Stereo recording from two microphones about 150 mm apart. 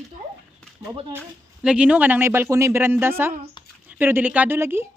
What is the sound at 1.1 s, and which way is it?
Speech, 5° right (ahead or behind).